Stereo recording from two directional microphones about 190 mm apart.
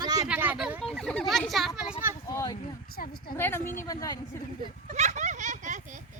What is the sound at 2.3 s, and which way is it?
A woman's voice, 15° left (ahead or behind).